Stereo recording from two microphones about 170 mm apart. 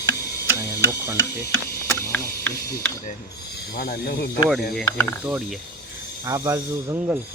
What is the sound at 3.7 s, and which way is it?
Speech, 65° left (ahead or behind).